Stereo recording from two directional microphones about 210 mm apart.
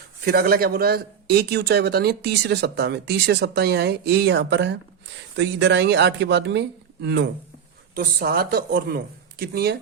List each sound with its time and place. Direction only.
0.3 s speech: 45° right (ahead or behind)